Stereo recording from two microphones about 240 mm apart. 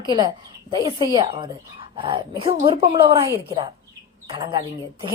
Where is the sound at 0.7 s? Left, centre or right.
Centre.